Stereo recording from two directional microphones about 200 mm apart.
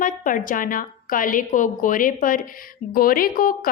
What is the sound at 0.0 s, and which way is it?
A woman's voice, 40° left (ahead or behind).